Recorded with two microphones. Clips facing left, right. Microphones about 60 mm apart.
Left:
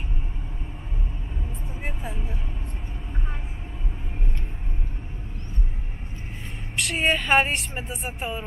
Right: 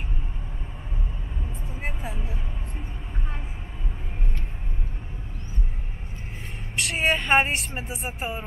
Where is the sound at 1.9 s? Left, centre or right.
Centre.